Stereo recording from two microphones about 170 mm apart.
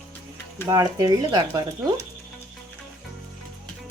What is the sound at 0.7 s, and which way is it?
Speech, 20° right (ahead or behind).